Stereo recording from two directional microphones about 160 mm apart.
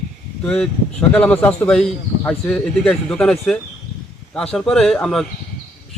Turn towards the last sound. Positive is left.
turn(degrees=5)  # may be behind; listen again after turning